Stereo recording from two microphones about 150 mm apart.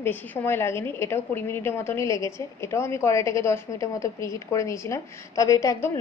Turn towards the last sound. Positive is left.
turn(degrees=20)  # may be behind; listen again after turning